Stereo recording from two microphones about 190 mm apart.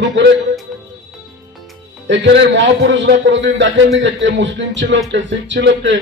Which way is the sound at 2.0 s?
70° right (ahead or behind).